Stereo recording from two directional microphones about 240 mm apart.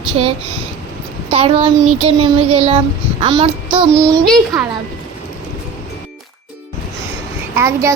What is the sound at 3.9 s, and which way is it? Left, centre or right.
Speech, centre.